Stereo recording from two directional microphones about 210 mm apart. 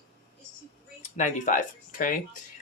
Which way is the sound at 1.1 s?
35° left (ahead or behind).